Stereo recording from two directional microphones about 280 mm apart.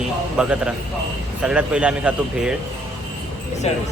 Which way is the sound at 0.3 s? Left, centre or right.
Centre.